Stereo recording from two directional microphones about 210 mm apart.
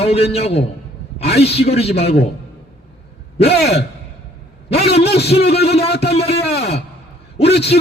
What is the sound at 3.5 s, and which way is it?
Speech, 50° left (ahead or behind).